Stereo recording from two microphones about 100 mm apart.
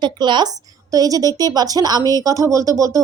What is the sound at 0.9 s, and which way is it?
A woman's voice, 35° right (ahead or behind).